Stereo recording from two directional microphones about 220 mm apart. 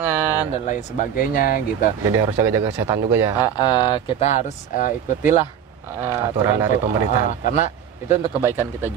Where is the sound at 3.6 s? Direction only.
20° left (ahead or behind); by 5.4 s 35° left (ahead or behind).